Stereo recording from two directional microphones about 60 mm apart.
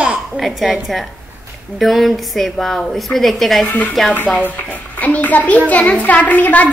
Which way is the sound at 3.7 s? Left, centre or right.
Left.